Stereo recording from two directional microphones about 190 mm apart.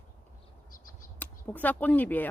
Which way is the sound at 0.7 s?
45° left (ahead or behind).